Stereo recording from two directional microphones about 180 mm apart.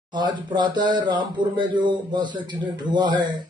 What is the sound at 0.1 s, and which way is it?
A man's voice, 25° right (ahead or behind).